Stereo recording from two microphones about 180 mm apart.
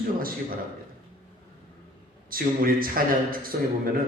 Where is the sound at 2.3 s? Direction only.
55° right (ahead or behind).